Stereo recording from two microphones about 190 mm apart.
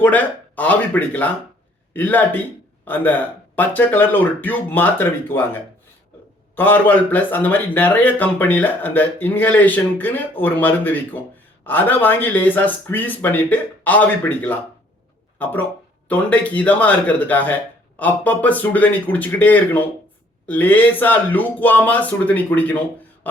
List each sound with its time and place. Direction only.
0.0 s speech: 10° left (ahead or behind)
16.0 s speech: 10° left (ahead or behind)
23.3 s a sound: 10° left (ahead or behind)